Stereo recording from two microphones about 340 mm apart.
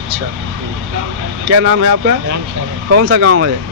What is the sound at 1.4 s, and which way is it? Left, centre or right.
Speech, right.